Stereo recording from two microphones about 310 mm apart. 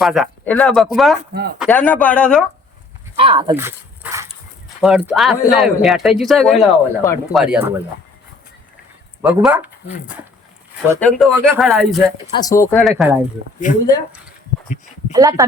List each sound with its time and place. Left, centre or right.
0.0 s speech: centre
1.2 s speech: right
1.5 s speech: centre
3.2 s speech: centre
9.2 s speech: centre
11.0 s speech: centre
12.3 s speech: centre
13.7 s speech: left
15.1 s speech: centre